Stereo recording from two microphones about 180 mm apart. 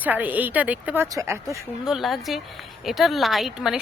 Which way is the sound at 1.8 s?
Centre (ahead or behind).